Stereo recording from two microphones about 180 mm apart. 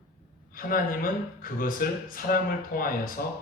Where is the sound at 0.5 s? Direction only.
50° left (ahead or behind).